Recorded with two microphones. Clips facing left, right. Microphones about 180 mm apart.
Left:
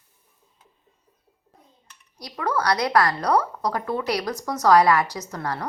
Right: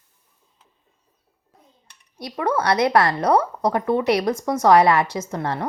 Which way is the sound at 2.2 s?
25° right (ahead or behind).